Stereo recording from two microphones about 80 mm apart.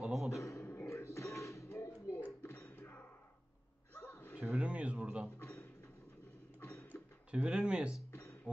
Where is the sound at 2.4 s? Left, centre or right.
Left.